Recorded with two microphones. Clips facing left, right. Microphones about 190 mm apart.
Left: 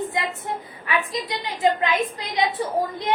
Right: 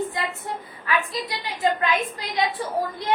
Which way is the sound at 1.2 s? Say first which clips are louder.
Left 3 dB; 20° left (ahead or behind).